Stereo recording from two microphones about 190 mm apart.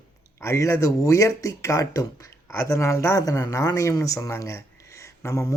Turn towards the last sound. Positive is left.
turn(degrees=15)  # may be behind; listen again after turning